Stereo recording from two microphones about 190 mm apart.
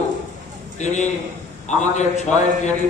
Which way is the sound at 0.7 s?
40° left (ahead or behind).